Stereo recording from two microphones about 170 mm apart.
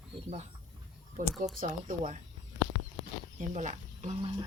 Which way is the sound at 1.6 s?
50° right (ahead or behind).